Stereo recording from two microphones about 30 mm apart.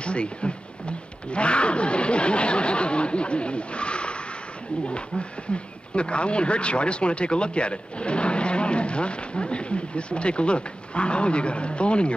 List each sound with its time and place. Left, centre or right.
0.0 s speech: left
5.5 s speech: left